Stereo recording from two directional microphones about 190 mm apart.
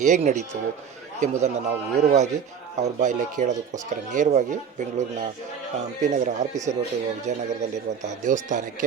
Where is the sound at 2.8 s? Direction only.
40° right (ahead or behind).